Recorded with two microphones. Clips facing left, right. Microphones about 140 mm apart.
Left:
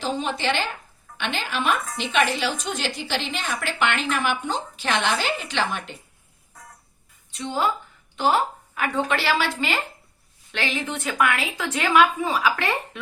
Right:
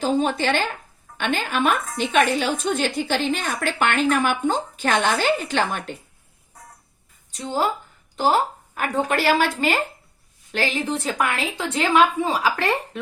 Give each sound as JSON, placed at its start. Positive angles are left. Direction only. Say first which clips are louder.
{"t": 0.0, "sound": "a woman's voice", "louder": "right 5 dB", "side_deg": -45}
{"t": 7.3, "sound": "a woman's voice", "louder": "right 1 dB", "side_deg": -40}